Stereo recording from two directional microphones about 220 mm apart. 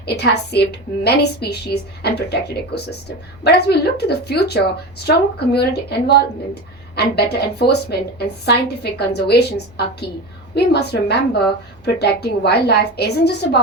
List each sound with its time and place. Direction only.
0.0 s a woman's voice: 50° left (ahead or behind)